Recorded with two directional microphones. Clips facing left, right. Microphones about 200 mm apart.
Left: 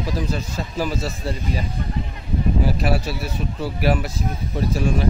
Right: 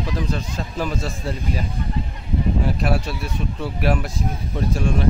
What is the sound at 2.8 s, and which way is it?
Speech, 5° left (ahead or behind).